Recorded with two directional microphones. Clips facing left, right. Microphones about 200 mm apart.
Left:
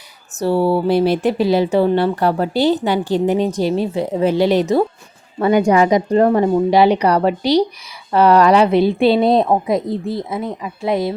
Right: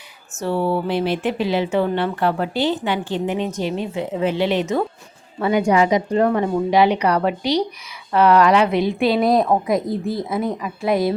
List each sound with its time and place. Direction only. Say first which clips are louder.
0.3 s a woman's voice: left 5 dB; 35° left (ahead or behind)